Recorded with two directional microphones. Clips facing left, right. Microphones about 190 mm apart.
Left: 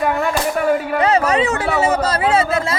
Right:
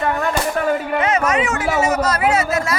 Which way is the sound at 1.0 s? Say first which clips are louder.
Left 4 dB; 30° left (ahead or behind).